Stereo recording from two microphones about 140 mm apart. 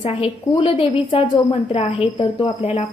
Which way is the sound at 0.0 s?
40° left (ahead or behind).